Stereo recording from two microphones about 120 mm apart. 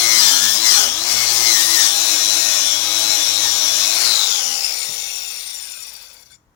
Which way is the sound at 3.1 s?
20° left (ahead or behind).